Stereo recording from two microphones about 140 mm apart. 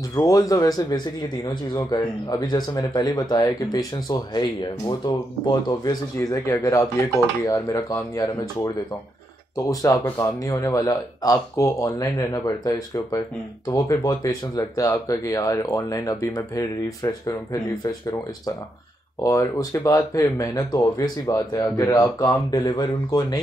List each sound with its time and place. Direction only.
0.1 s speech: 25° left (ahead or behind)
19.2 s speech: 20° left (ahead or behind)